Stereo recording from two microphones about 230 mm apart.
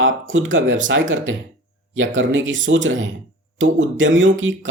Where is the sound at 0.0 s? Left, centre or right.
Right.